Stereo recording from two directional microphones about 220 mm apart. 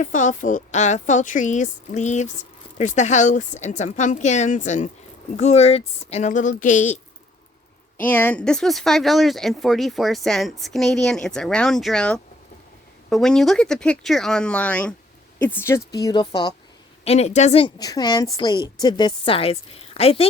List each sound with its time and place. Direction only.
0.0 s a woman's voice: 35° left (ahead or behind)
8.0 s speech: 10° left (ahead or behind)
15.9 s a woman's voice: 15° left (ahead or behind)